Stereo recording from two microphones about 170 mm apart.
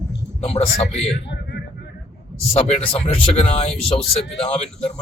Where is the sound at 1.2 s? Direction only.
90° left.